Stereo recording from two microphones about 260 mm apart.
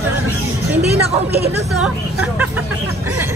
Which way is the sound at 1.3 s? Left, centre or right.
Right.